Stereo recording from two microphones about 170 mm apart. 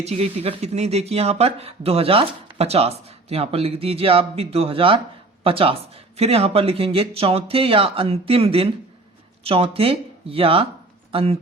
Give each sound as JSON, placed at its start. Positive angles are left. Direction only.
{"t": 0.0, "sound": "speech", "side_deg": -40}